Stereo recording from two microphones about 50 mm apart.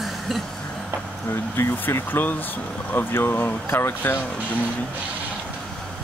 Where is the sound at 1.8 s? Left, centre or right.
Left.